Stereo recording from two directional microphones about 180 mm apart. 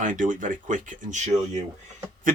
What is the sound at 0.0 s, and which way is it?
Speech, 45° right (ahead or behind).